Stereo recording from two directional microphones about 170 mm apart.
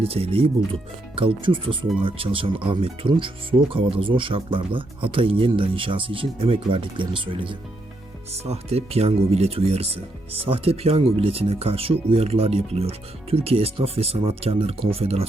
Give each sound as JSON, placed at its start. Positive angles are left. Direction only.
{"t": 0.0, "sound": "speech", "side_deg": -35}